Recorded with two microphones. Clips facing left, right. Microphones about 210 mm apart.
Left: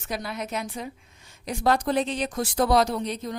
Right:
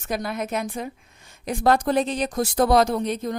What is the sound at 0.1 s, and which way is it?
Speech, 50° right (ahead or behind).